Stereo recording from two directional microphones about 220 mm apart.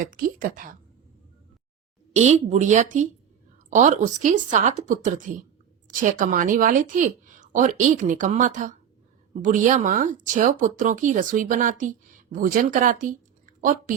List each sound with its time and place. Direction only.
0.0 s speech: 40° right (ahead or behind)
2.1 s speech: 30° right (ahead or behind)